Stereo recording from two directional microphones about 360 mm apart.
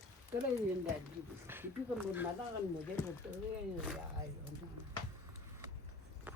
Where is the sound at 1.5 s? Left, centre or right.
Centre.